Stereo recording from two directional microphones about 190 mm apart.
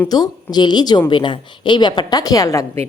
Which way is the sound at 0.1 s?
20° left (ahead or behind).